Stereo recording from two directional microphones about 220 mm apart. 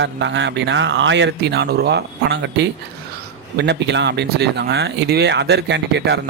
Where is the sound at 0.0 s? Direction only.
55° right (ahead or behind).